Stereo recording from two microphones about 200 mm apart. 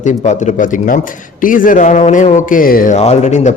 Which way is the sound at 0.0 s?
35° left (ahead or behind).